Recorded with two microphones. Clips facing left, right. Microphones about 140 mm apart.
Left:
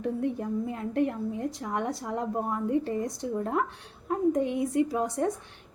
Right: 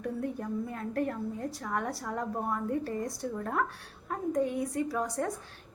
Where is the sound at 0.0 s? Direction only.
20° left (ahead or behind).